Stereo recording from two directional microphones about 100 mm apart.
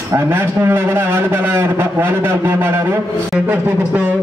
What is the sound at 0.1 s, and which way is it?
A man's voice, 20° right (ahead or behind).